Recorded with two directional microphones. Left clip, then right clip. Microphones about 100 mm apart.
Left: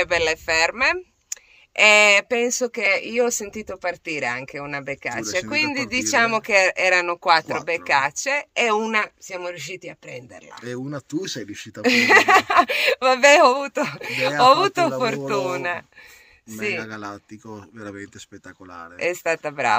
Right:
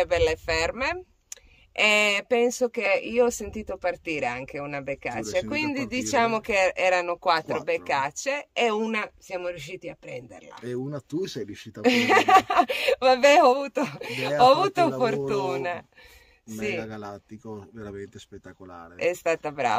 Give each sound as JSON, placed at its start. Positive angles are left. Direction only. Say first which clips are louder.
{"t": 0.0, "sound": "speech", "louder": "left 2 dB", "side_deg": 15}
{"t": 10.5, "sound": "speech", "louder": "left 2 dB", "side_deg": -35}
{"t": 11.8, "sound": "speech", "louder": "left 5 dB", "side_deg": 10}
{"t": 16.8, "sound": "speech", "louder": "left 4 dB", "side_deg": -30}
{"t": 18.9, "sound": "speech", "louder": "left 2 dB", "side_deg": 15}